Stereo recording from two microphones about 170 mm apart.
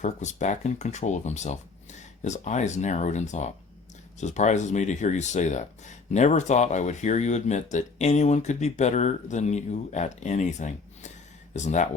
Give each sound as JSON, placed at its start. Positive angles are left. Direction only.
{"t": 0.0, "sound": "speech", "side_deg": 45}